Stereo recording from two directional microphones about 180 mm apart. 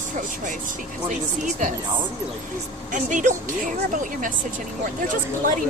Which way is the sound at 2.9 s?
45° right (ahead or behind).